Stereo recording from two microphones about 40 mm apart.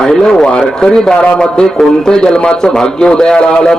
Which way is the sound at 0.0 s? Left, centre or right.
Centre.